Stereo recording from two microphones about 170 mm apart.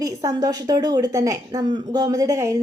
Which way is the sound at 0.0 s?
20° right (ahead or behind).